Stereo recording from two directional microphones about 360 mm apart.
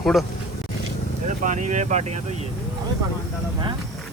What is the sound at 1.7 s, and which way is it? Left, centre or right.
Speech, centre.